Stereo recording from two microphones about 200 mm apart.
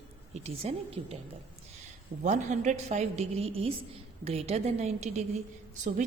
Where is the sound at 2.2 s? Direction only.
35° right (ahead or behind).